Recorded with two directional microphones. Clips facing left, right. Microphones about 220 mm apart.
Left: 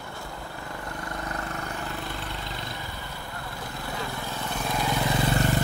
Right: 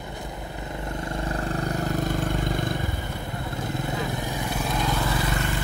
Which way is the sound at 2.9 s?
20° right (ahead or behind).